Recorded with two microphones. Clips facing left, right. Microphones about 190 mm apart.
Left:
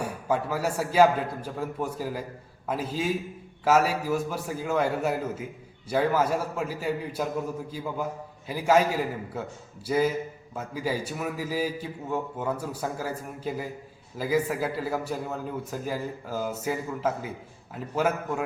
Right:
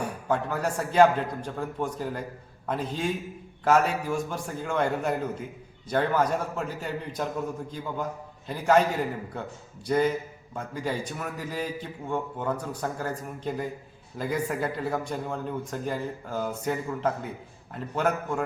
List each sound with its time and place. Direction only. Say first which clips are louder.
0.0 s a man's voice: even; 5° left (ahead or behind)